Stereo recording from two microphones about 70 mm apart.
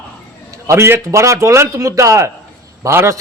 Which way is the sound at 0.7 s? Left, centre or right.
Right.